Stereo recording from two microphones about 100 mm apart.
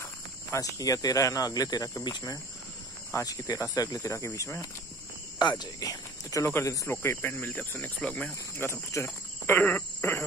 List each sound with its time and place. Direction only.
0.0 s speech: 30° left (ahead or behind)
5.4 s speech: 45° left (ahead or behind); by 8.3 s 10° left (ahead or behind)
8.5 s speech: 25° left (ahead or behind)